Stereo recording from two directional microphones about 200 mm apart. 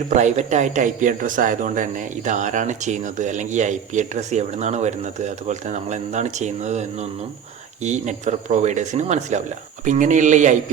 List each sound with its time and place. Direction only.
0.1 s speech: 35° right (ahead or behind)
7.9 s speech: 35° right (ahead or behind)